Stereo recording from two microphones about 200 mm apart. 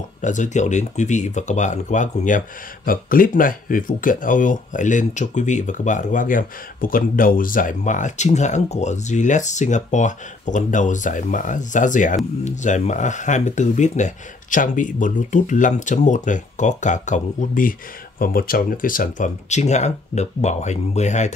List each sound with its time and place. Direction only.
0.2 s speech: 40° left (ahead or behind)